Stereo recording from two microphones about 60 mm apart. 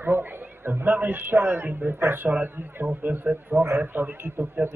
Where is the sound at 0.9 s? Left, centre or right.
Right.